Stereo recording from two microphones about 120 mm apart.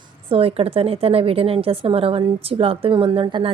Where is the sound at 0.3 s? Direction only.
55° right (ahead or behind).